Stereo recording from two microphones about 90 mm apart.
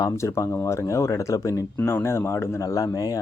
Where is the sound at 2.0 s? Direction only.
30° left (ahead or behind).